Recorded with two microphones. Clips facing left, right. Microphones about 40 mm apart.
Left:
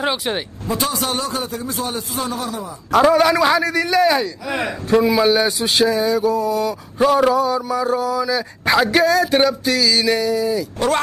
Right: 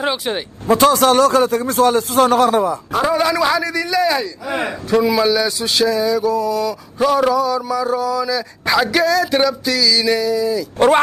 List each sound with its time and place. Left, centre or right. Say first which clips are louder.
0.0 s speech: right 1 dB; centre
0.7 s speech: right 10 dB; right
3.1 s a man's voice: even; left
4.5 s speech: right 5 dB; centre
5.0 s a sound: even; centre
7.0 s speech: even; centre
7.3 s a sound: right 1 dB; left
7.8 s speech: right 1 dB; centre
8.7 s a sound: even; centre